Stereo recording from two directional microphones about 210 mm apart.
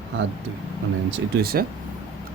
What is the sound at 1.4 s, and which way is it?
Speech, 45° right (ahead or behind).